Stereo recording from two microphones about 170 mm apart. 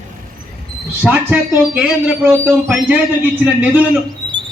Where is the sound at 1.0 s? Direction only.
5° right (ahead or behind).